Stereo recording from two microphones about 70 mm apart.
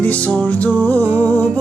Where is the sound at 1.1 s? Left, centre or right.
Right.